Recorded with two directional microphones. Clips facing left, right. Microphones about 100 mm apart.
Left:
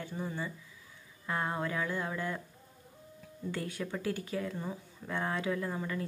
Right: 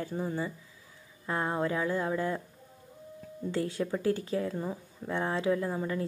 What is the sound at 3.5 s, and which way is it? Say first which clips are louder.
Speech: right 6 dB; 30° right (ahead or behind).